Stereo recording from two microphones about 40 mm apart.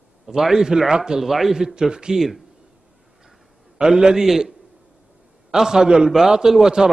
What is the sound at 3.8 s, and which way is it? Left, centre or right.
A man's voice, centre.